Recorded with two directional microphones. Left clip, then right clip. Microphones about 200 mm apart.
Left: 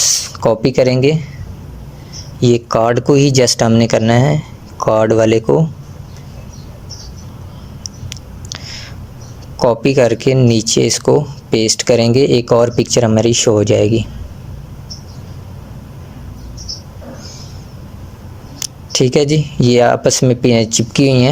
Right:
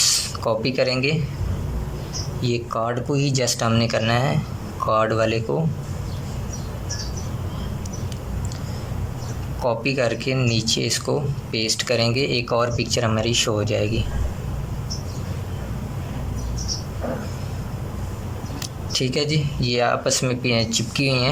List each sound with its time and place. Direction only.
0.0 s speech: 35° left (ahead or behind)
2.4 s speech: 40° left (ahead or behind)
9.6 s speech: 35° left (ahead or behind)
18.6 s speech: 35° left (ahead or behind)